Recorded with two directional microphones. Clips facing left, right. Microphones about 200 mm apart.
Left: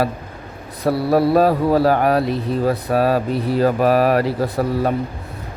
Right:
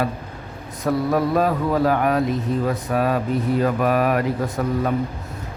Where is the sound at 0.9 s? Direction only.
35° left (ahead or behind).